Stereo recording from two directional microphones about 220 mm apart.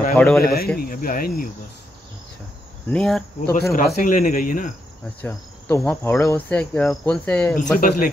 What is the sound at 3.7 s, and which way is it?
Speech, 40° left (ahead or behind).